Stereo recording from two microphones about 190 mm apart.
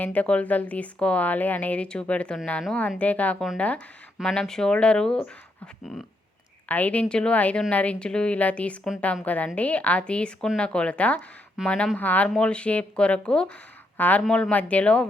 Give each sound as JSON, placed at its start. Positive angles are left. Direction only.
{"t": 0.0, "sound": "speech", "side_deg": 5}
{"t": 6.7, "sound": "speech", "side_deg": 10}